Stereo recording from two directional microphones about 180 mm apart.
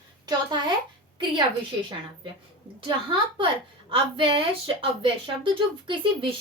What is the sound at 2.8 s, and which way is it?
Speech, 25° right (ahead or behind).